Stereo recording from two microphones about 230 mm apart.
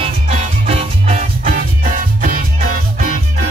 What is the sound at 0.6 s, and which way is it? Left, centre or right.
Music, right.